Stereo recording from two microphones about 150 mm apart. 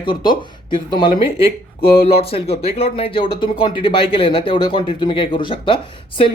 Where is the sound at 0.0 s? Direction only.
30° left (ahead or behind).